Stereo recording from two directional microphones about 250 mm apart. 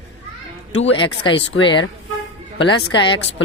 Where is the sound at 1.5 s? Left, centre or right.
Left.